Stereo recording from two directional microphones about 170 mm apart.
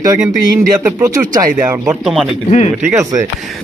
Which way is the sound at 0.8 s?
20° right (ahead or behind).